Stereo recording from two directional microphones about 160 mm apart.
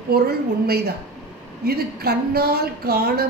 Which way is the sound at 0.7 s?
75° right (ahead or behind).